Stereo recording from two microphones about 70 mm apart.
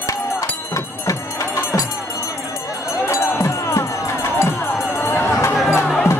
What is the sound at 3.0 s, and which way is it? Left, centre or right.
Music, left.